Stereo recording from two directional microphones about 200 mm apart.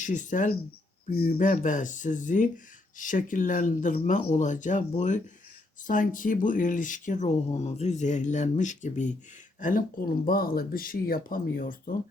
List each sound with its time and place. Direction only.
0.0 s speech: 40° left (ahead or behind)
1.0 s speech: 50° left (ahead or behind)